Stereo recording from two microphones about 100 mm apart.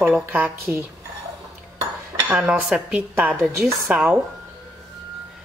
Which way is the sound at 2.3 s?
10° right (ahead or behind).